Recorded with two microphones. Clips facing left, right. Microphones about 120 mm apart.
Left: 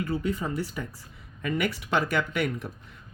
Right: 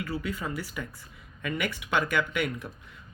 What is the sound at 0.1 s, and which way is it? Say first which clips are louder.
Speech: left 4 dB; 30° left (ahead or behind).